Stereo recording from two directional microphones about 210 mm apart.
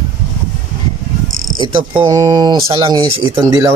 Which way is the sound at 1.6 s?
20° right (ahead or behind).